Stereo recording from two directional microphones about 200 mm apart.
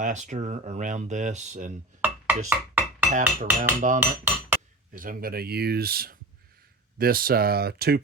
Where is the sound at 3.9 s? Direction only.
10° right (ahead or behind).